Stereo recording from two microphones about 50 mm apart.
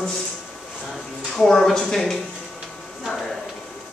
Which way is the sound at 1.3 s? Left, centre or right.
Centre.